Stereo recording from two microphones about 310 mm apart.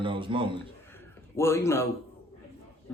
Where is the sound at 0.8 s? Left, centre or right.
Centre.